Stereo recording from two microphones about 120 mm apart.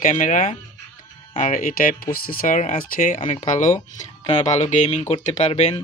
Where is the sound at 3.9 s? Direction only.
70° left (ahead or behind).